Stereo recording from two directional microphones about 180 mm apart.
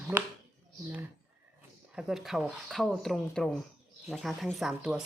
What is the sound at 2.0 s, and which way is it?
Speech, centre (ahead or behind).